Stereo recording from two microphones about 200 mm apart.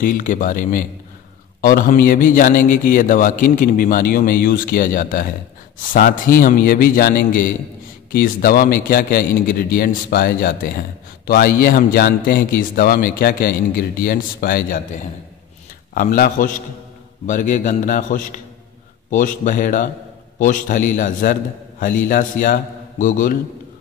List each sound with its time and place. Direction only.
0.0 s a man's voice: 40° left (ahead or behind)
15.9 s a man's voice: 45° left (ahead or behind)